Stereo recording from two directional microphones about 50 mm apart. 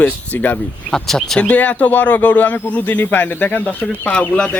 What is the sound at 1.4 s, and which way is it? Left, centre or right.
A man's voice, left.